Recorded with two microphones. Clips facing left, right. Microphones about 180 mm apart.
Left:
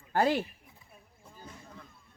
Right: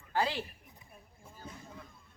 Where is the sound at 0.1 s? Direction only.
50° left (ahead or behind).